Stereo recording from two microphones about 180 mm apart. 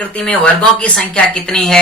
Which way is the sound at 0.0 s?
5° left (ahead or behind).